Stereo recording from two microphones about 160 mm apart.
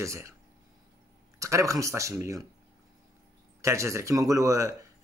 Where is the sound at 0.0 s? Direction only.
20° right (ahead or behind).